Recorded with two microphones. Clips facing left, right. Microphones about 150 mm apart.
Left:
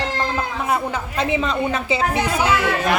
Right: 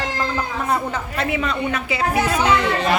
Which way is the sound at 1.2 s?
25° left (ahead or behind).